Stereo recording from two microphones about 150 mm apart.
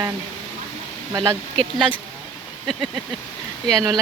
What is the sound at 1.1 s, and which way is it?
Speech, 25° right (ahead or behind).